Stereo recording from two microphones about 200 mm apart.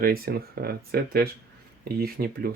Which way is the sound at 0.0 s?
50° right (ahead or behind).